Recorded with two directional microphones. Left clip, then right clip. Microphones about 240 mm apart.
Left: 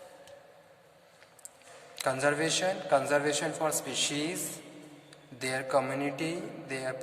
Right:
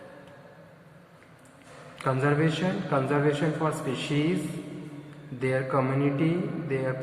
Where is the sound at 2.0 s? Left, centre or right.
Left.